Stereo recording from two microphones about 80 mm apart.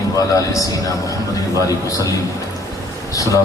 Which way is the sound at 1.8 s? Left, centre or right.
Left.